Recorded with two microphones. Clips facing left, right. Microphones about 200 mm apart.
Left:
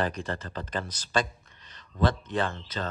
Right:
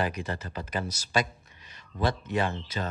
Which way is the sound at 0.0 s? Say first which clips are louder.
Left 1 dB; 10° right (ahead or behind).